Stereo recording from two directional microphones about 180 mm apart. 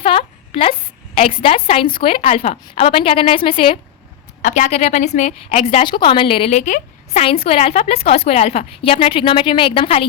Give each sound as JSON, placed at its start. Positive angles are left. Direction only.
{"t": 0.0, "sound": "a sound", "side_deg": 30}
{"t": 1.4, "sound": "a woman's voice", "side_deg": 30}
{"t": 4.4, "sound": "a woman's voice", "side_deg": 45}